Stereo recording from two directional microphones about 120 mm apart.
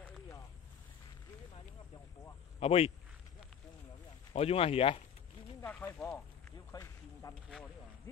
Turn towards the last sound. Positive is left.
turn(degrees=-5)  # may be behind; listen again after turning